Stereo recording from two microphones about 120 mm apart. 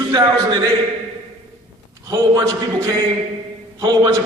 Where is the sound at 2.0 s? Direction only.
25° right (ahead or behind).